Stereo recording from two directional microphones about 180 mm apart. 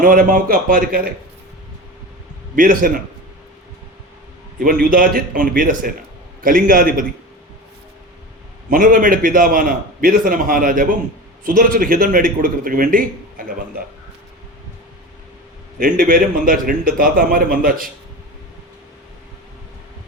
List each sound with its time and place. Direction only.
0.0 s a man's voice: 50° right (ahead or behind)
2.6 s a man's voice: 50° right (ahead or behind)
4.6 s a man's voice: 50° right (ahead or behind)
8.7 s a man's voice: 50° right (ahead or behind)
15.8 s a man's voice: 50° right (ahead or behind)